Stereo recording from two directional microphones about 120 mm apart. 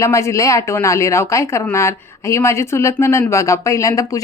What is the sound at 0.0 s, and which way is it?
Speech, 25° left (ahead or behind).